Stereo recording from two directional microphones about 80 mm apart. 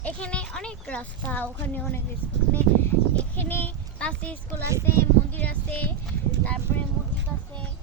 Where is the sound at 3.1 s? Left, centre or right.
Left.